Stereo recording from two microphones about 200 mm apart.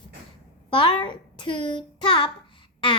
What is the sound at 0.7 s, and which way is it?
Speech, 25° left (ahead or behind).